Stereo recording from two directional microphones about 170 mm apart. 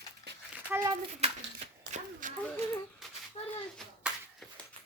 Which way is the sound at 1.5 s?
50° right (ahead or behind).